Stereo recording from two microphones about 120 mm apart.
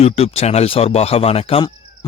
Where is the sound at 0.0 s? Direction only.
60° left (ahead or behind).